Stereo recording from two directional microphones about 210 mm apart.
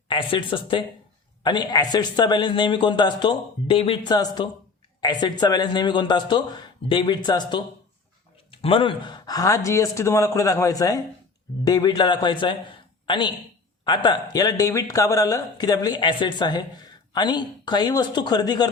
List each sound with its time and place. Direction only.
0.1 s speech: 25° left (ahead or behind)